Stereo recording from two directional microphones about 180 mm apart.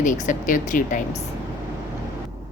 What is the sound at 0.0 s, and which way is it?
A woman's voice, 45° left (ahead or behind).